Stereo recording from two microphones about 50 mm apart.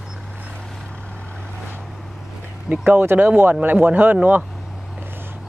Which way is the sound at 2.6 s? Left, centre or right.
Right.